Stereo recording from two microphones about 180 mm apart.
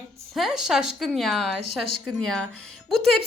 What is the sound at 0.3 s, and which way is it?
A woman's voice, centre (ahead or behind).